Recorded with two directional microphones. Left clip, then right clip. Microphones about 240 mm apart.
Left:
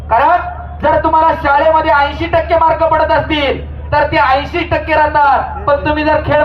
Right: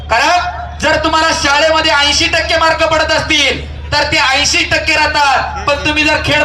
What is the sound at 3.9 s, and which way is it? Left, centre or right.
A man's voice, right.